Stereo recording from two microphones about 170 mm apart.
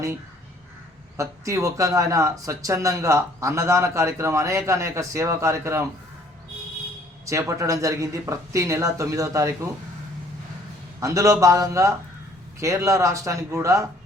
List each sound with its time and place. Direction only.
1.1 s speech: 15° right (ahead or behind)
7.3 s speech: 20° right (ahead or behind)
11.0 s speech: 20° right (ahead or behind)